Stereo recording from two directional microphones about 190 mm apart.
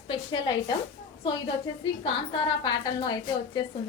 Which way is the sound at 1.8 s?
25° left (ahead or behind).